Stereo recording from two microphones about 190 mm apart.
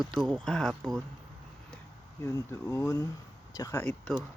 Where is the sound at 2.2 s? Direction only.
15° left (ahead or behind).